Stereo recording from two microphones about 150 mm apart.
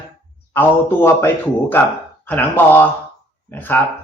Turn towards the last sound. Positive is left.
turn(degrees=10)  # may be behind; listen again after turning